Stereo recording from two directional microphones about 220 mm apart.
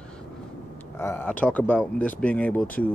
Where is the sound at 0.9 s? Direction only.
10° left (ahead or behind).